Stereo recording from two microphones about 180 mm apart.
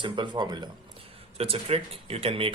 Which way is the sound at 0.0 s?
25° right (ahead or behind).